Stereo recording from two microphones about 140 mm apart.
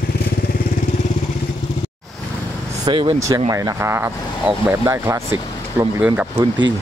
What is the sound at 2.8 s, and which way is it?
Speech, 35° right (ahead or behind).